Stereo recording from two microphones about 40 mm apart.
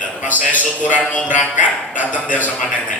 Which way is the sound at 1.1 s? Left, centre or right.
Left.